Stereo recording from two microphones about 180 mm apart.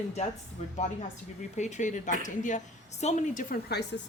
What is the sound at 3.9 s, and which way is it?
Speech, 85° left.